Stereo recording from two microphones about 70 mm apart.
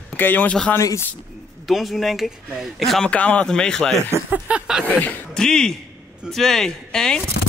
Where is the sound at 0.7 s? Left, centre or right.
Left.